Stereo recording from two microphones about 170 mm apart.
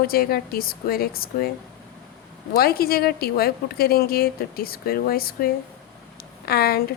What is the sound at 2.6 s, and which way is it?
A woman's voice, 65° left (ahead or behind).